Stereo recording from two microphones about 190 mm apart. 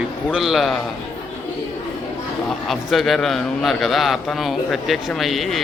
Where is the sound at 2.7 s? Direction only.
Centre (ahead or behind).